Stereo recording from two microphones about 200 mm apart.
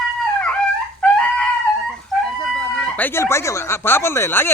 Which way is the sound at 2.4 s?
5° left (ahead or behind).